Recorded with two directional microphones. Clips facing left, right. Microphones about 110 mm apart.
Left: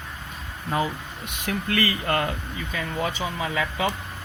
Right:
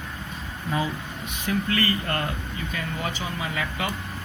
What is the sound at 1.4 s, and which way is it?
Speech, 90° left.